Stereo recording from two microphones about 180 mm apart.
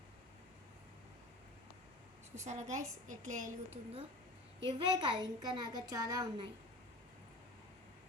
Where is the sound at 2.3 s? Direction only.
40° right (ahead or behind).